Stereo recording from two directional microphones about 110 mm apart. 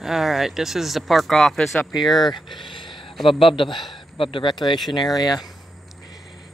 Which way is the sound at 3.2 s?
55° left (ahead or behind).